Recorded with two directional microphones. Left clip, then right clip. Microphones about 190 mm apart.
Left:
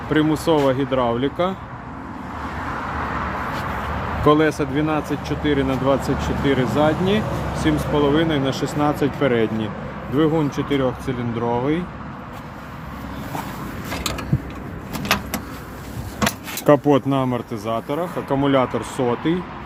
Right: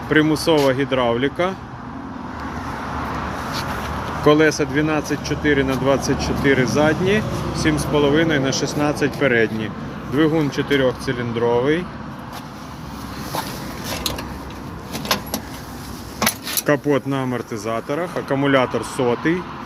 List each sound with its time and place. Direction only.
0.1 s speech: 10° left (ahead or behind)
4.3 s speech: 10° left (ahead or behind)
16.6 s speech: 50° left (ahead or behind)
17.5 s speech: 25° left (ahead or behind)